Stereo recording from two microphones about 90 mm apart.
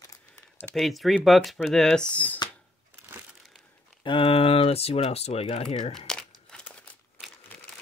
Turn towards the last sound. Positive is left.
turn(degrees=15)  # may be behind; listen again after turning